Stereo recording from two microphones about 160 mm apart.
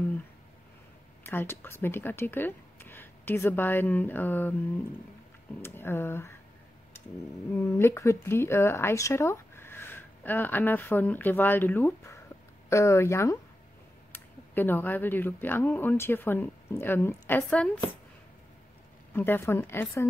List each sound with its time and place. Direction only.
1.2 s speech: 15° left (ahead or behind)
5.6 s speech: 15° left (ahead or behind)
7.5 s speech: 15° left (ahead or behind)
19.1 s speech: 15° left (ahead or behind)